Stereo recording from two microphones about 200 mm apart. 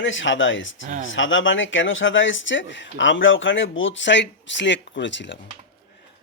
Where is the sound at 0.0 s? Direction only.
70° left (ahead or behind).